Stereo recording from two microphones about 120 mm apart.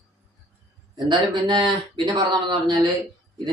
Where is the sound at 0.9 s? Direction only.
40° right (ahead or behind).